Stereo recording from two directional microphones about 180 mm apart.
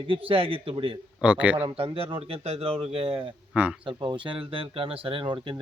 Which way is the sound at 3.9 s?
25° right (ahead or behind).